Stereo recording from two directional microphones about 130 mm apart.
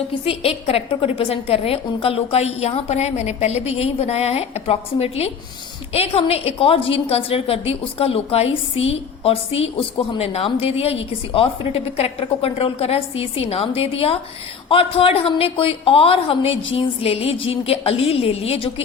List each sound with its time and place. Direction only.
0.3 s a woman's voice: 50° left (ahead or behind)